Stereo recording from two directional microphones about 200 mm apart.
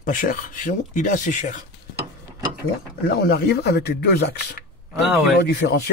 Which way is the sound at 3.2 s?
55° left (ahead or behind).